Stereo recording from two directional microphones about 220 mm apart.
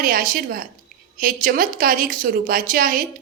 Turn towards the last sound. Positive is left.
turn(degrees=-40)  # may be behind; listen again after turning